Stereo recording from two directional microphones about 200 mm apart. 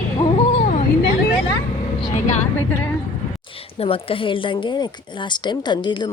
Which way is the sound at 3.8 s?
30° left (ahead or behind).